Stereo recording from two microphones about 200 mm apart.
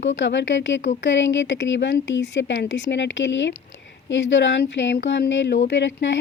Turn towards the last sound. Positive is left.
turn(degrees=65)  # may be behind; listen again after turning